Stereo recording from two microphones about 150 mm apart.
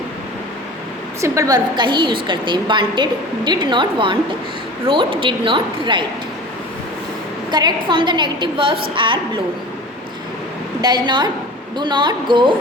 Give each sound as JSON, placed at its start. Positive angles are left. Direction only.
{"t": 1.2, "sound": "a woman's voice", "side_deg": -25}
{"t": 7.5, "sound": "a woman's voice", "side_deg": -30}
{"t": 10.8, "sound": "a woman's voice", "side_deg": -30}